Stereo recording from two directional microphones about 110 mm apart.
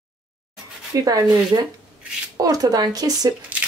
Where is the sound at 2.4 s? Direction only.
35° right (ahead or behind).